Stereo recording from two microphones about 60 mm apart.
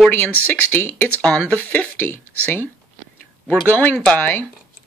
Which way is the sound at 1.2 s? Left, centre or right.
Centre.